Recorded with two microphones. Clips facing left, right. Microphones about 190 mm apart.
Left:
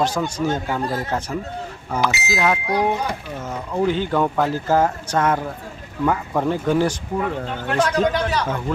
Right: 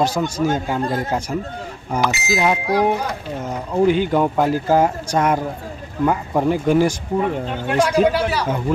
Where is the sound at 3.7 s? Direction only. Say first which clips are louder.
Right 4 dB; 15° right (ahead or behind).